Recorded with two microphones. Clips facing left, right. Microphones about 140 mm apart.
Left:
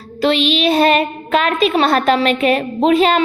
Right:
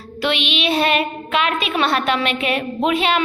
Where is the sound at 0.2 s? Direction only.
35° left (ahead or behind).